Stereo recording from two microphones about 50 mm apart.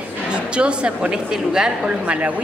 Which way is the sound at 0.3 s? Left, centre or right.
Right.